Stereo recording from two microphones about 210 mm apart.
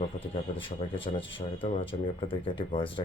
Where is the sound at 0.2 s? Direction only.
25° left (ahead or behind).